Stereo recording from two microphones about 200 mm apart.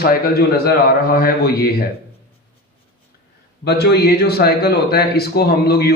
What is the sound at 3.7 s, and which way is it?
Speech, 55° left (ahead or behind).